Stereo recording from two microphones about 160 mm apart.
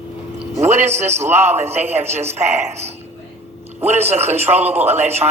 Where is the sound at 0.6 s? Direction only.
45° right (ahead or behind).